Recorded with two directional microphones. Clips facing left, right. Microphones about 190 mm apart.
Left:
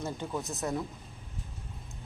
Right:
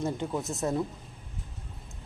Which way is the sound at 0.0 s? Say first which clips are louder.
Right 4 dB; 20° right (ahead or behind).